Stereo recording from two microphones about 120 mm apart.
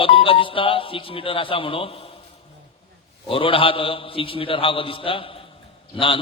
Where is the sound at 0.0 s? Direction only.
50° left (ahead or behind).